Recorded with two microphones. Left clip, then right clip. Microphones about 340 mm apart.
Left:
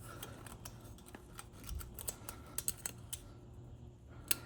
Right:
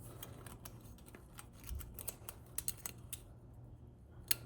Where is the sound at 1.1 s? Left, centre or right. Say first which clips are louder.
Left 4 dB; centre.